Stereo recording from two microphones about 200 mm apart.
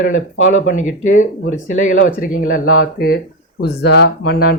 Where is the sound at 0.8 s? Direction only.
40° left (ahead or behind).